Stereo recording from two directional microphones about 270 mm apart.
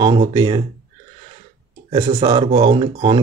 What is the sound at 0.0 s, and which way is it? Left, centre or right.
Speech, centre.